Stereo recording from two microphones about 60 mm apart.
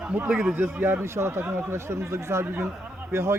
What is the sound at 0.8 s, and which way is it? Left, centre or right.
A man's voice, right.